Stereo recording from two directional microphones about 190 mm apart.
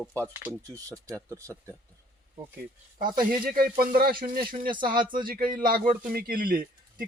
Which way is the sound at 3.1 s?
50° right (ahead or behind).